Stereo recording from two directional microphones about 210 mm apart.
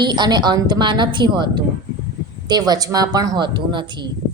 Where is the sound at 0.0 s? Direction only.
20° right (ahead or behind).